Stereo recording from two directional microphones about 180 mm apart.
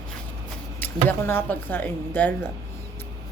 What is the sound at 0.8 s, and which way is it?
Speech, 10° left (ahead or behind).